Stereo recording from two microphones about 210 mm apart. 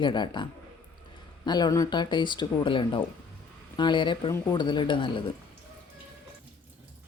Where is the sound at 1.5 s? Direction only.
20° left (ahead or behind).